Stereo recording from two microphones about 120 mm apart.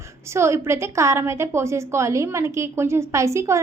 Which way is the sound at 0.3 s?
20° right (ahead or behind).